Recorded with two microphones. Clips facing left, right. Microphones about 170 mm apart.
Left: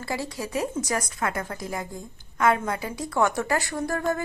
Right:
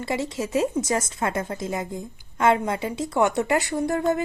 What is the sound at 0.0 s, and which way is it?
A woman's voice, 20° right (ahead or behind).